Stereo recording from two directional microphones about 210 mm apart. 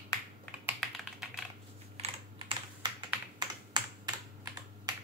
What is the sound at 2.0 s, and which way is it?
Computer keyboard, 25° right (ahead or behind).